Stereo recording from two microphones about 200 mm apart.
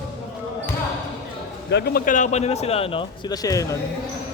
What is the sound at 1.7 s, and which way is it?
A man's voice, 50° left (ahead or behind).